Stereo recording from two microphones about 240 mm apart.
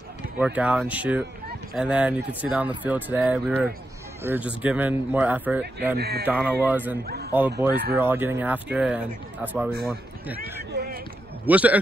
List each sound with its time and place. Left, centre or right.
0.4 s speech: centre
5.9 s speech: right
6.2 s speech: centre
7.1 s a man's voice: right
7.9 s speech: centre
10.7 s a sound: right
11.4 s speech: centre